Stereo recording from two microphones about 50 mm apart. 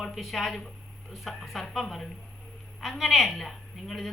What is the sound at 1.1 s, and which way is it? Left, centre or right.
A woman's voice, centre.